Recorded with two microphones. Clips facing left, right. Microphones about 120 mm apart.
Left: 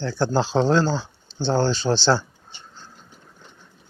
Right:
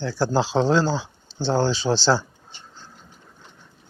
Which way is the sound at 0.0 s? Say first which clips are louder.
Even; 5° right (ahead or behind).